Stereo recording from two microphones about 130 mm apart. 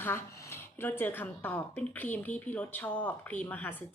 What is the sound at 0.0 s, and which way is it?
A woman's voice, 20° left (ahead or behind).